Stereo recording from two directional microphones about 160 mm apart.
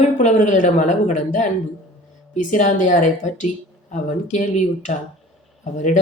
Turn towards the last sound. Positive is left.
turn(degrees=50)  # may be behind; listen again after turning